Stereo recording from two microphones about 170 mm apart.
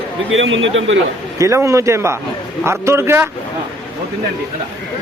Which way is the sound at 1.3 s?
15° right (ahead or behind).